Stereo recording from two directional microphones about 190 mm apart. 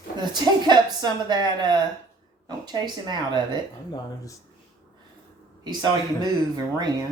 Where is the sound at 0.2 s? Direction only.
20° right (ahead or behind).